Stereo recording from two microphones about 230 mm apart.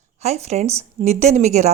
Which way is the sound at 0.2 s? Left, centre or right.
Right.